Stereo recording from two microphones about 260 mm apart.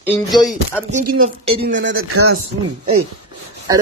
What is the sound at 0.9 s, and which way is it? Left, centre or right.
Speech, right.